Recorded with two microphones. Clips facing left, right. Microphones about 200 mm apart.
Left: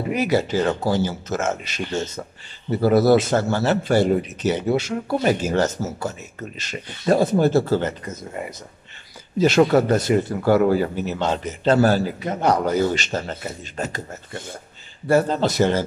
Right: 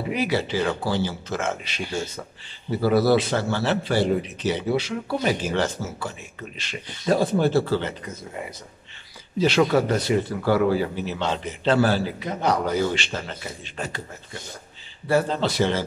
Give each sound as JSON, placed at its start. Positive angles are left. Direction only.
{"t": 0.1, "sound": "speech", "side_deg": 45}
{"t": 1.8, "sound": "a man's voice", "side_deg": -10}
{"t": 2.8, "sound": "speech", "side_deg": 45}
{"t": 9.4, "sound": "speech", "side_deg": 45}